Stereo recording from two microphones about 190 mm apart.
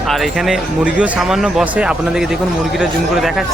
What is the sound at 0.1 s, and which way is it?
Speech, centre (ahead or behind).